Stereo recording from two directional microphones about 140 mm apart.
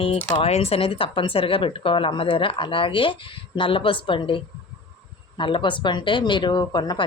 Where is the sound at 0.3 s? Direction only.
45° left (ahead or behind).